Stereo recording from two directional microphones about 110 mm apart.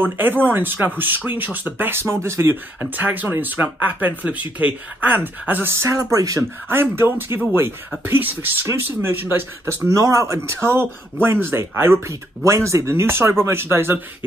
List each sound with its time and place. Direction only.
0.0 s speech: 15° right (ahead or behind)